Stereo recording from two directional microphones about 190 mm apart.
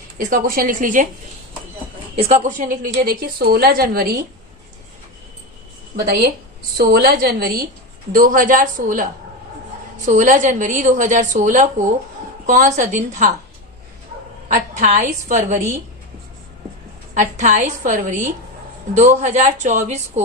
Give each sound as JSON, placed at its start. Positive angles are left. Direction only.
{"t": 0.3, "sound": "a woman's voice", "side_deg": -50}
{"t": 2.1, "sound": "a woman's voice", "side_deg": -35}
{"t": 6.0, "sound": "a woman's voice", "side_deg": -55}
{"t": 10.1, "sound": "a woman's voice", "side_deg": -40}
{"t": 14.4, "sound": "a woman's voice", "side_deg": -40}
{"t": 17.2, "sound": "a woman's voice", "side_deg": -40}